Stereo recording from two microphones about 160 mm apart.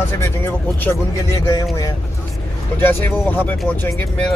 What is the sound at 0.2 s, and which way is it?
Speech, 10° left (ahead or behind).